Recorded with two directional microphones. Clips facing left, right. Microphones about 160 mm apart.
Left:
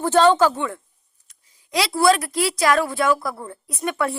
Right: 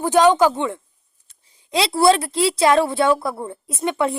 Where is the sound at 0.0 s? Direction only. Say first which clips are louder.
Right 1 dB; 15° right (ahead or behind).